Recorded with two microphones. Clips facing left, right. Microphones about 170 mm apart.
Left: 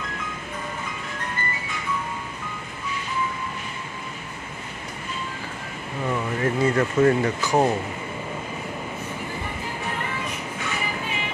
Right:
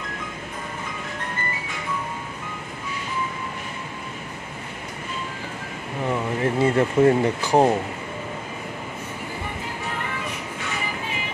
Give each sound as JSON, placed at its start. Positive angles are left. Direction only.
{"t": 6.0, "sound": "speech", "side_deg": -25}